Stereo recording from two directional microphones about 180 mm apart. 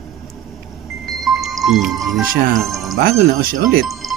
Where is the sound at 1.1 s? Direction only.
Centre (ahead or behind).